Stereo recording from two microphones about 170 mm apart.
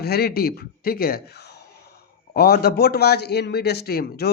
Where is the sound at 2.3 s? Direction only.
65° left (ahead or behind).